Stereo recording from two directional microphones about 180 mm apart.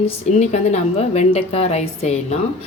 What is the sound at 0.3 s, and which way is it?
A woman's voice, 35° left (ahead or behind).